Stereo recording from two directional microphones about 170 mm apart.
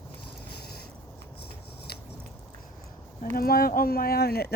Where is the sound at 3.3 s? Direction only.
60° left (ahead or behind).